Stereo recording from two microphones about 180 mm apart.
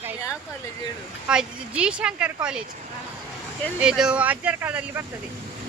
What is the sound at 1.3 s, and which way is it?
Speech, 5° right (ahead or behind).